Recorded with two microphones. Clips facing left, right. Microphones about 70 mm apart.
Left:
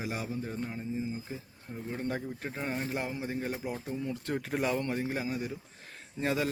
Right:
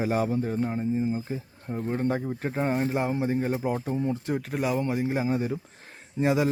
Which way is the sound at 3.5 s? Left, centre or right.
Right.